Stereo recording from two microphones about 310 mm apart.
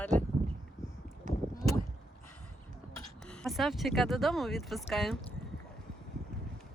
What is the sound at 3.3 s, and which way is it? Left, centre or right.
Speech, centre.